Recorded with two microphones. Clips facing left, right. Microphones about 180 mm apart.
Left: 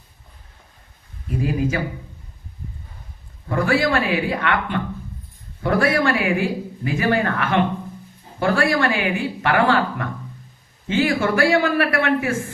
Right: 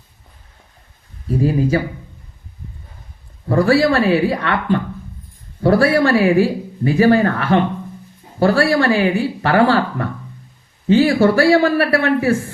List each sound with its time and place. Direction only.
1.3 s speech: 35° right (ahead or behind)
3.5 s speech: 35° right (ahead or behind)